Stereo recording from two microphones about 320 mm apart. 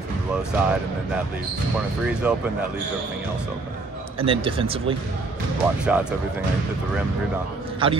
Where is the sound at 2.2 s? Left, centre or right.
Centre.